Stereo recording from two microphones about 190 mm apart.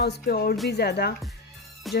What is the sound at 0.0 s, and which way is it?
Speech, 55° left (ahead or behind).